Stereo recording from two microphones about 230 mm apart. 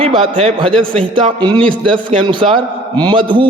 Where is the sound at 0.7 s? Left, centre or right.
Centre.